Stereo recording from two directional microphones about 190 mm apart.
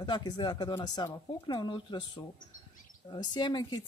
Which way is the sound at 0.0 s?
25° left (ahead or behind).